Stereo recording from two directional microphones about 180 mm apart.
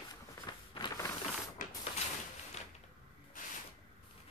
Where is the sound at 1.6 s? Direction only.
50° left (ahead or behind).